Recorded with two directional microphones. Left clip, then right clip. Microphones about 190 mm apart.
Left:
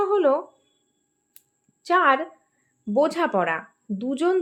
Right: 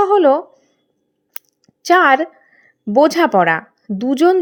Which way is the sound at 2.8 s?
40° right (ahead or behind).